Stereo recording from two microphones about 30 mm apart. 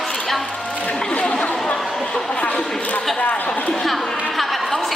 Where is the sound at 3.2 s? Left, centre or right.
Left.